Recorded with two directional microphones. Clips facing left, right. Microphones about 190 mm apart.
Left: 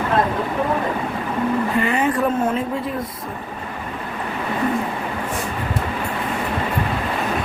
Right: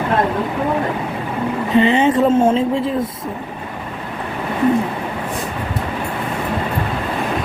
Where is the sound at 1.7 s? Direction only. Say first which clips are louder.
Right 6 dB; 25° right (ahead or behind).